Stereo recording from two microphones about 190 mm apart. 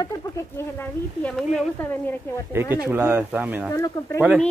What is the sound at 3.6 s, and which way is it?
Speech, 15° left (ahead or behind).